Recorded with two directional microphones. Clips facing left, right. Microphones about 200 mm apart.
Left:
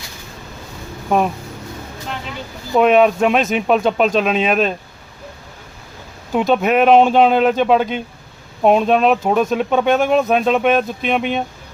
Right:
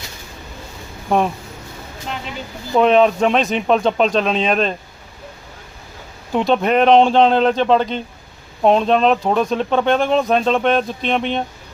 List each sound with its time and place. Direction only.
2.7 s speech: 5° left (ahead or behind)
6.3 s speech: 5° left (ahead or behind)